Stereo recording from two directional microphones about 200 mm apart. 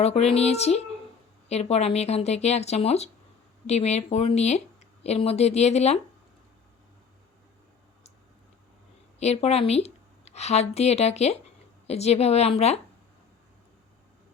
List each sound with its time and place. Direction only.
0.0 s speech: 30° left (ahead or behind)
9.1 s a woman's voice: 30° left (ahead or behind)